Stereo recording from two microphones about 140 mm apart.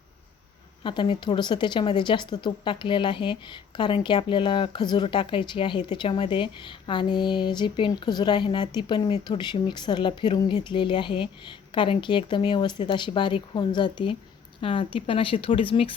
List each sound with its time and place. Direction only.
0.9 s speech: 35° left (ahead or behind)